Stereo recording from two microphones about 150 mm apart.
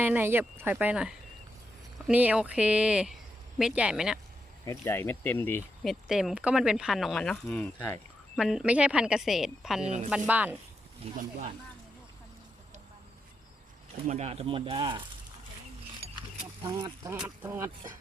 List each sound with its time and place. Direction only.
0.0 s speech: 15° right (ahead or behind)
4.6 s speech: 20° left (ahead or behind)
5.8 s speech: centre (ahead or behind)
8.4 s speech: 5° right (ahead or behind)
11.2 s speech: 50° right (ahead or behind)
14.1 s speech: 45° right (ahead or behind)
16.6 s speech: 25° right (ahead or behind)